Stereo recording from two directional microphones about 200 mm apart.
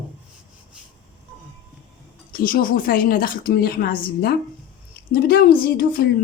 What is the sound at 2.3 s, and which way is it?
A woman's voice, 45° left (ahead or behind).